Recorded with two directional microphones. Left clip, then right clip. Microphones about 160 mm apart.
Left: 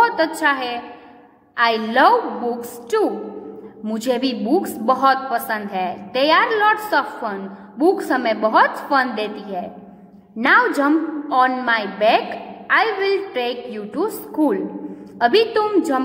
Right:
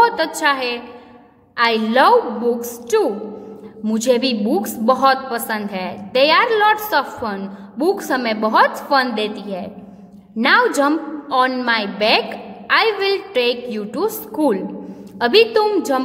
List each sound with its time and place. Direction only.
0.0 s a woman's voice: 30° right (ahead or behind)
3.8 s a woman's voice: 30° right (ahead or behind)